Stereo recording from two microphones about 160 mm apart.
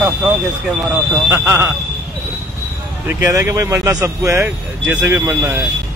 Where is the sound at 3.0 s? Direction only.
15° right (ahead or behind).